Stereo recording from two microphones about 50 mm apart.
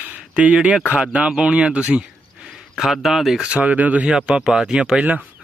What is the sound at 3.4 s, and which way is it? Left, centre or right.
Speech, right.